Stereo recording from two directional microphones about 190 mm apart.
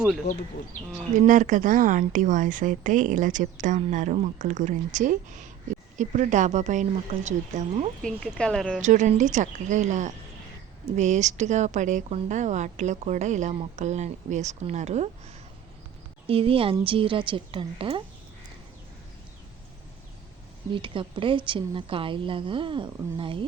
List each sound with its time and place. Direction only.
1.1 s a woman's voice: 40° right (ahead or behind)
8.0 s speech: 5° left (ahead or behind)
8.8 s a woman's voice: 40° right (ahead or behind)
16.2 s a woman's voice: 30° right (ahead or behind)
20.7 s a woman's voice: 25° right (ahead or behind)